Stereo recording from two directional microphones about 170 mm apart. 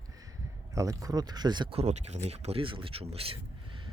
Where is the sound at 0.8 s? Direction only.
20° right (ahead or behind).